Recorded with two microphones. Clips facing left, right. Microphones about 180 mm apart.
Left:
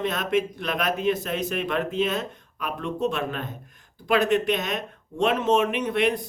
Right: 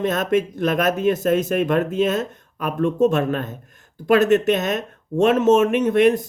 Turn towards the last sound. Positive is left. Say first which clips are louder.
# right 8 dB
turn(degrees=-45)  # may be behind; listen again after turning